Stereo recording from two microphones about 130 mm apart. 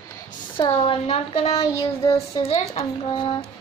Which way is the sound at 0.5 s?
40° left (ahead or behind).